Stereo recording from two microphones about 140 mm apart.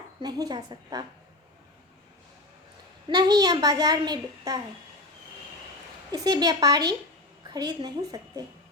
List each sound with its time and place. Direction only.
0.2 s a child's voice: 30° right (ahead or behind)
3.1 s a child's voice: 30° right (ahead or behind)
6.1 s a child's voice: 30° right (ahead or behind)